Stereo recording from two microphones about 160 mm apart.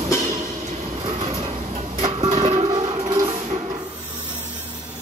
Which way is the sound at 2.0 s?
30° right (ahead or behind).